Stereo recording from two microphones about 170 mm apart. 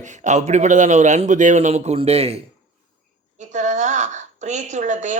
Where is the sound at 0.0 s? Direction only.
45° right (ahead or behind).